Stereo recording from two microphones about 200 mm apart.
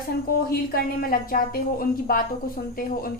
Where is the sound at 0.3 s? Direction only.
50° left (ahead or behind).